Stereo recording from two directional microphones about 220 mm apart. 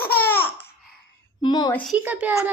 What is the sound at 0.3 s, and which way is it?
Laughter, 10° left (ahead or behind).